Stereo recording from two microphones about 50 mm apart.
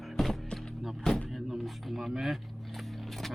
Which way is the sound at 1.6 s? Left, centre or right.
Centre.